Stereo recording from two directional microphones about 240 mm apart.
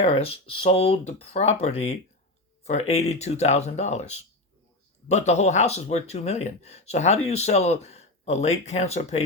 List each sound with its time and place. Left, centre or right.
0.0 s speech: left